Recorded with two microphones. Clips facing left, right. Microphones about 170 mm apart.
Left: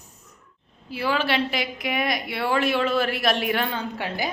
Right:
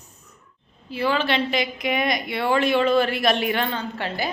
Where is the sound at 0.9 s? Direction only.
5° left (ahead or behind).